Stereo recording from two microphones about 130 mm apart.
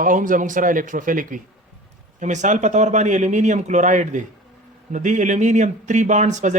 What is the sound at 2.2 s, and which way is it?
Speech, 70° right (ahead or behind).